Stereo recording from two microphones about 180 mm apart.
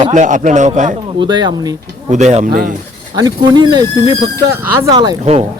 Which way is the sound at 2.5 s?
55° right (ahead or behind).